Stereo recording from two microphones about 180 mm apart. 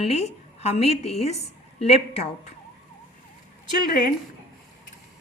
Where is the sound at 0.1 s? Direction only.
35° left (ahead or behind).